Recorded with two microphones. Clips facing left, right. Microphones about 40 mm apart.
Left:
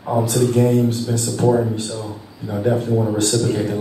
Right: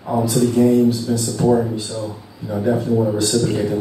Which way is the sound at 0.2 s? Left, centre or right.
Left.